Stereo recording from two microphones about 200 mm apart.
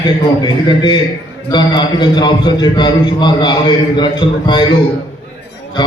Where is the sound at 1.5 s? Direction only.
20° left (ahead or behind).